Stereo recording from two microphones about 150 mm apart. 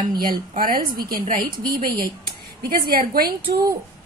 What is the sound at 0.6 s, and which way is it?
A woman's voice, 75° right (ahead or behind).